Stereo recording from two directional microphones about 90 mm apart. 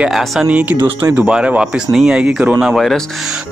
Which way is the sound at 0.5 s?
20° right (ahead or behind).